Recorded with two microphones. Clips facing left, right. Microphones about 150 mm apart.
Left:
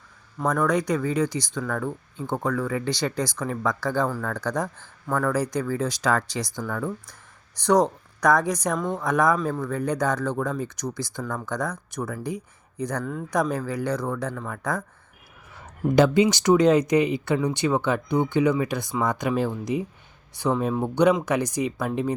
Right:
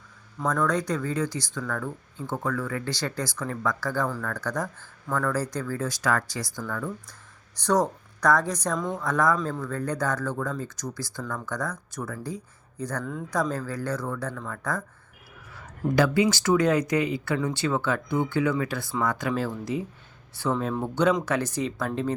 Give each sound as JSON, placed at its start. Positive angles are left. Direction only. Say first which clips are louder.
{"t": 0.3, "sound": "speech", "louder": "left 3 dB", "side_deg": 10}
{"t": 13.0, "sound": "speech", "louder": "left 3 dB", "side_deg": 0}
{"t": 13.3, "sound": "speech", "louder": "left 3 dB", "side_deg": 15}
{"t": 16.0, "sound": "speech", "louder": "left 4 dB", "side_deg": 20}